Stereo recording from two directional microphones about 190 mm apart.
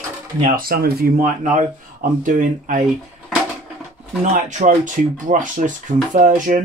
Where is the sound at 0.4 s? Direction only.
50° right (ahead or behind).